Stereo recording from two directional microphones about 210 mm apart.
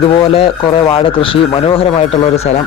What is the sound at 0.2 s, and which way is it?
Speech, 25° left (ahead or behind).